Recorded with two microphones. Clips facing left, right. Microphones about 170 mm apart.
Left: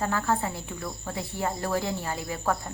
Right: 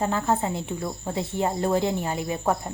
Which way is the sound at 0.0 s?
20° right (ahead or behind).